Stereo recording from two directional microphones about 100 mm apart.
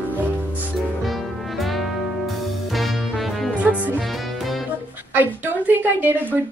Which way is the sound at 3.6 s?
15° right (ahead or behind).